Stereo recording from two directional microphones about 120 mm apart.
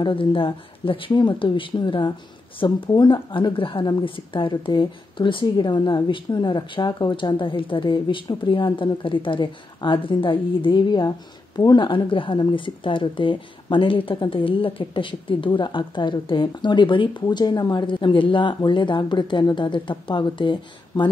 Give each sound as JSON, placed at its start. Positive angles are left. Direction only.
{"t": 0.0, "sound": "a woman's voice", "side_deg": 45}